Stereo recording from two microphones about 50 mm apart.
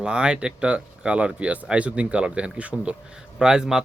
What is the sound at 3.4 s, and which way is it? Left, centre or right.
Speech, centre.